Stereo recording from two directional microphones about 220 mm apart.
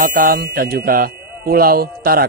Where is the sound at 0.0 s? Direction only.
40° right (ahead or behind).